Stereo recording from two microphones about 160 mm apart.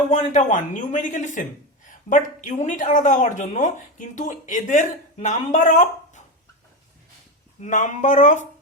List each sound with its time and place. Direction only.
0.1 s a woman's voice: 50° left (ahead or behind)
7.6 s a woman's voice: 50° left (ahead or behind)